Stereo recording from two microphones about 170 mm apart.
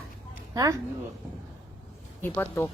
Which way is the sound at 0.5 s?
20° right (ahead or behind).